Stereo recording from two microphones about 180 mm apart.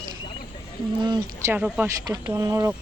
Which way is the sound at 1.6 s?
5° right (ahead or behind).